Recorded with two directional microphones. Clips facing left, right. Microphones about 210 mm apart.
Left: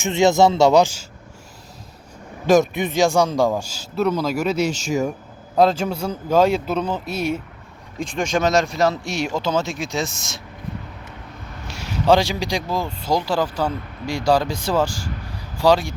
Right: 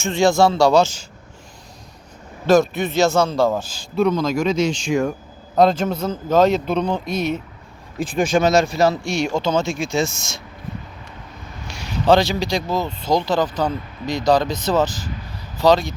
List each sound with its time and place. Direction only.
0.0 s speech: 20° left (ahead or behind)
2.5 s speech: 15° left (ahead or behind)
7.9 s speech: 5° right (ahead or behind)
11.7 s speech: 10° left (ahead or behind)